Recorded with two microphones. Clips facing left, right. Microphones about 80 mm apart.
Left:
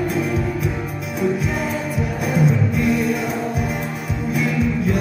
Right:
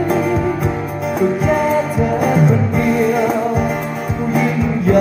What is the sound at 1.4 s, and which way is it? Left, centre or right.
Music, right.